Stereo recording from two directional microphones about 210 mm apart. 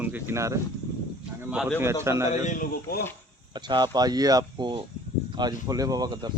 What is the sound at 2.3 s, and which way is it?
Speech, 40° left (ahead or behind).